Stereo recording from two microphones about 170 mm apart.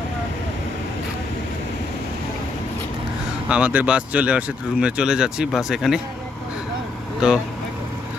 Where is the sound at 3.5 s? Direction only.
10° right (ahead or behind).